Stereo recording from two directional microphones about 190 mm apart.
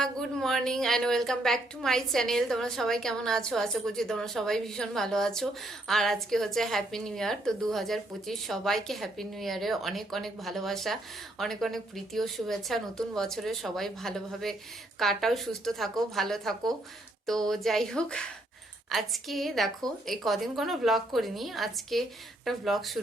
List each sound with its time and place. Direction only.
0.0 s a woman's voice: centre (ahead or behind)